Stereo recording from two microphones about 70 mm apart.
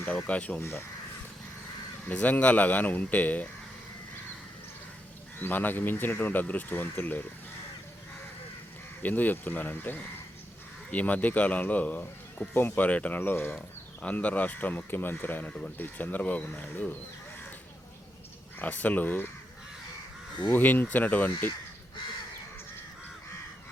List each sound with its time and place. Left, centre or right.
0.1 s speech: centre
0.6 s speech: left
2.0 s speech: left
5.4 s speech: left
9.0 s speech: left
15.4 s speech: centre
18.6 s speech: left
20.5 s speech: left